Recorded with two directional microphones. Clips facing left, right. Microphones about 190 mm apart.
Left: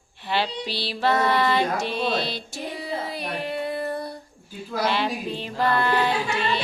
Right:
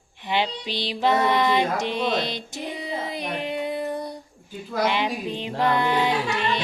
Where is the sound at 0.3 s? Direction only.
20° right (ahead or behind).